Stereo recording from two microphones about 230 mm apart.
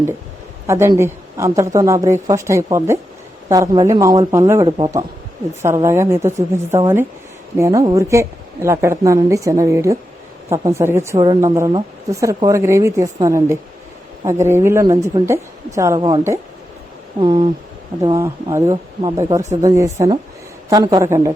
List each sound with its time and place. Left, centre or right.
0.7 s a woman's voice: centre
17.2 s a sound: right
18.0 s a woman's voice: centre